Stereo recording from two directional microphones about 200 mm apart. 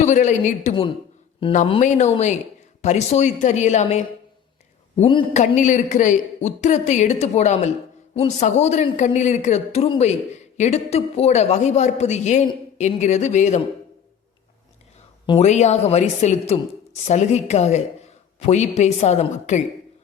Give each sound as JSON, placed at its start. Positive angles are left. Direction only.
{"t": 0.0, "sound": "a woman's voice", "side_deg": 35}
{"t": 4.9, "sound": "a woman's voice", "side_deg": 30}
{"t": 15.3, "sound": "a woman's voice", "side_deg": 35}